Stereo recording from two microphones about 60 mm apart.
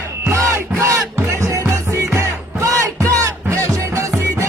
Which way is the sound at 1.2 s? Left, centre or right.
Right.